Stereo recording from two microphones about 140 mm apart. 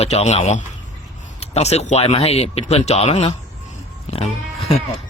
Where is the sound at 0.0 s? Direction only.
50° left (ahead or behind).